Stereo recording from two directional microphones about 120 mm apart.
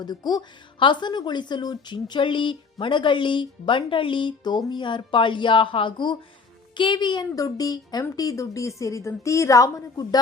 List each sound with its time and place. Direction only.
0.0 s a woman's voice: 35° left (ahead or behind)